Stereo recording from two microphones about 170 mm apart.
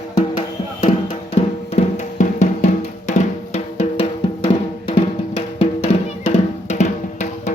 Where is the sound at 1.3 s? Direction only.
40° left (ahead or behind).